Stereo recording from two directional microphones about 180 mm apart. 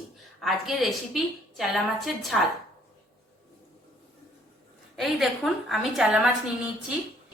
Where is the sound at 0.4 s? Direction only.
Centre (ahead or behind).